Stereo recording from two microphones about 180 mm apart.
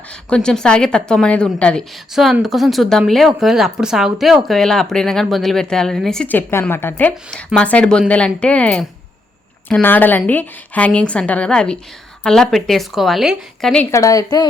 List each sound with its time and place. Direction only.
0.1 s a woman's voice: 5° left (ahead or behind)
13.9 s speech: 20° left (ahead or behind)